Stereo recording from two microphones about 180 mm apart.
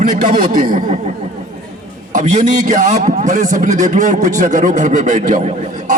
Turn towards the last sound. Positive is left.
turn(degrees=-45)  # may be behind; listen again after turning